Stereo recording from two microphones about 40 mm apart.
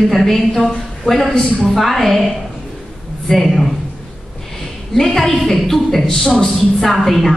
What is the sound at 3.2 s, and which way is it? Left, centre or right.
Speech, centre.